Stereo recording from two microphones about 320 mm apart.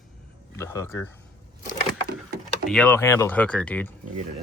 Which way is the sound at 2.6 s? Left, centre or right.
Centre.